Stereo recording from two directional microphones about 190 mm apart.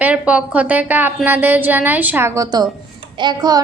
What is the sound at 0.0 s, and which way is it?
A woman's voice, 5° right (ahead or behind).